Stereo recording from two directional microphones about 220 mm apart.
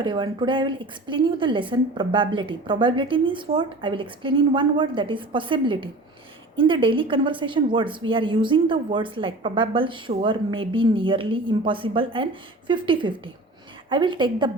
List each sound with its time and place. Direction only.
0.0 s speech: 20° right (ahead or behind)